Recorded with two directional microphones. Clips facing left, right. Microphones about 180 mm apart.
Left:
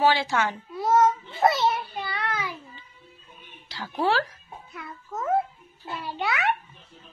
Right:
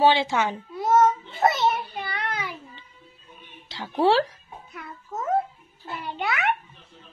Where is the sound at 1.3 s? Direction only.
20° right (ahead or behind).